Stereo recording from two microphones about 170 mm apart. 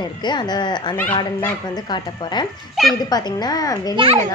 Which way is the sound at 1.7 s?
25° left (ahead or behind).